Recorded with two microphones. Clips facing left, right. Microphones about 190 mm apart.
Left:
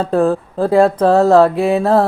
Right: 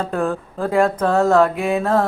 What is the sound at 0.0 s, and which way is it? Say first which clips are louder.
Mantra: left 7 dB; 35° left (ahead or behind).